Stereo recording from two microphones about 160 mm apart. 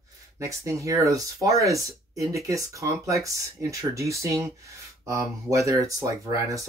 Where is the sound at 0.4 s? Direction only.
20° right (ahead or behind).